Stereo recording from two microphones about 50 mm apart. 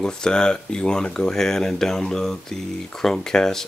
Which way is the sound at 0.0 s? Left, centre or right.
Centre.